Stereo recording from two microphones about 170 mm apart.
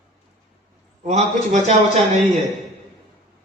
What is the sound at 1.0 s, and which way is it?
A man's voice, 45° right (ahead or behind).